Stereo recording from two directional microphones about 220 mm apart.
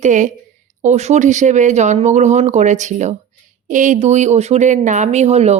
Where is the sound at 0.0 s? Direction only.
35° right (ahead or behind).